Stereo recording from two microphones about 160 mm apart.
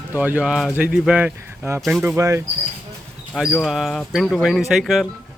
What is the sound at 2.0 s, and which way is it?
Speech, 15° right (ahead or behind).